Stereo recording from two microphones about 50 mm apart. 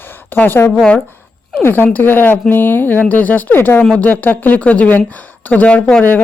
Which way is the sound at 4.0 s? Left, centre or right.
Left.